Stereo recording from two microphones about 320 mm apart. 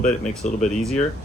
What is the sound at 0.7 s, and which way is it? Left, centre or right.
Speech, centre.